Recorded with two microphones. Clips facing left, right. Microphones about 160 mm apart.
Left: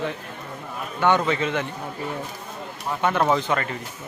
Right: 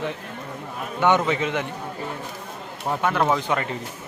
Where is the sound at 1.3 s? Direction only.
15° right (ahead or behind).